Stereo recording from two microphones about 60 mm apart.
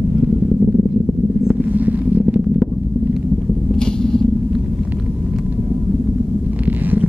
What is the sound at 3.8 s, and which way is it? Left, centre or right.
Vehicle, centre.